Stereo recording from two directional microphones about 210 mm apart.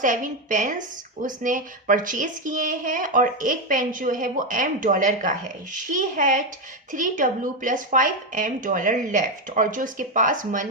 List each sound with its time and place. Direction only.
0.0 s speech: 40° right (ahead or behind)